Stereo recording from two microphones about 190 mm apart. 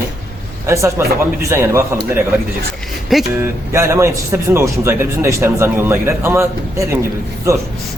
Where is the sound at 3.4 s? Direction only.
15° right (ahead or behind).